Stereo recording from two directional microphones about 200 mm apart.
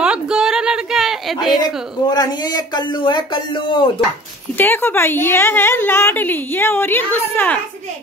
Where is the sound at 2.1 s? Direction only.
20° left (ahead or behind).